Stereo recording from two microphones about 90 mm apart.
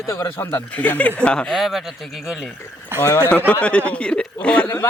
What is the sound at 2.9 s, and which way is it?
Speech, 25° right (ahead or behind).